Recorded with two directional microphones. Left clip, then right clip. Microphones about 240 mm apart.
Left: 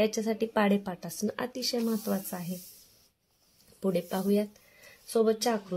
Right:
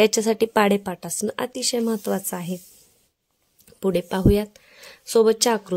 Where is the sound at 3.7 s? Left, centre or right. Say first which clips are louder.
Right 7 dB; right.